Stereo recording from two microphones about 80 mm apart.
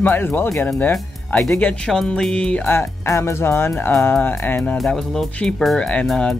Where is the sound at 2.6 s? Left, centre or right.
Left.